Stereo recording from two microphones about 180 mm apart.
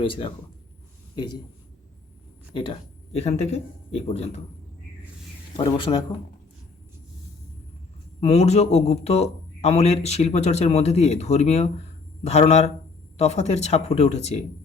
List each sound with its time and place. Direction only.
0.0 s a man's voice: 30° left (ahead or behind)
2.5 s a man's voice: 25° left (ahead or behind)
5.5 s speech: 25° left (ahead or behind)
8.2 s a man's voice: 35° left (ahead or behind)